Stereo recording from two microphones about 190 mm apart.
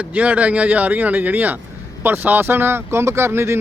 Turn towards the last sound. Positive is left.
turn(degrees=-15)  # may be behind; listen again after turning